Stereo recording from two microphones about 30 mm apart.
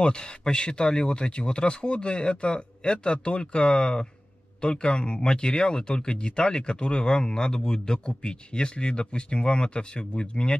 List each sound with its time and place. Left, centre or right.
0.0 s speech: left